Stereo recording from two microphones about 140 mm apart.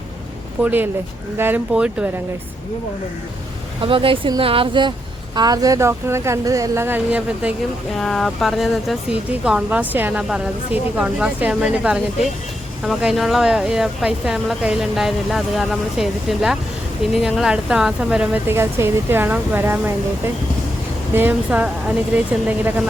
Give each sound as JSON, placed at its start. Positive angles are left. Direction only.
{"t": 0.6, "sound": "speech", "side_deg": -15}
{"t": 3.8, "sound": "a woman's voice", "side_deg": -40}
{"t": 7.9, "sound": "speech", "side_deg": 0}